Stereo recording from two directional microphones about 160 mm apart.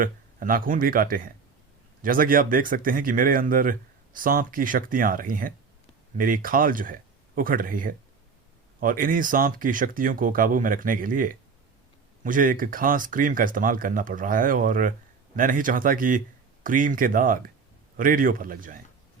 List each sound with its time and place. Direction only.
0.0 s speech: 60° right (ahead or behind)